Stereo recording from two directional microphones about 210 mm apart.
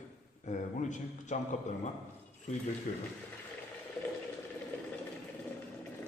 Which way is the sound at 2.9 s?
35° left (ahead or behind).